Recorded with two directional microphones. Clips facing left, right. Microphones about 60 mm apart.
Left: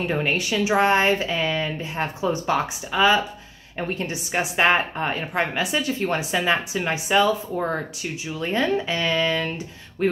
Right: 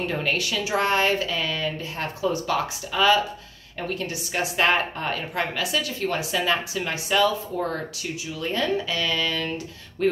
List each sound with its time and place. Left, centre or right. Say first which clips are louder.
0.1 s a woman's voice: left 2 dB; left